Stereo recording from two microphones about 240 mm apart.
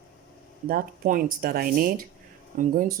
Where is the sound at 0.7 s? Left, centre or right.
Right.